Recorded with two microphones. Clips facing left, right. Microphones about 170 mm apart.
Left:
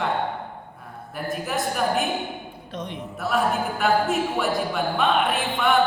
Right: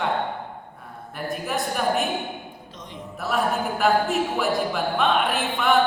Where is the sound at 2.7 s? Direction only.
65° left (ahead or behind).